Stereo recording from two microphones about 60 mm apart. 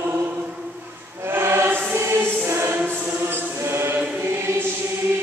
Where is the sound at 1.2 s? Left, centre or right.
Right.